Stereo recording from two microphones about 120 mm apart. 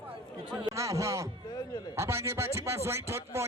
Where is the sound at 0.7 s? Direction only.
25° right (ahead or behind).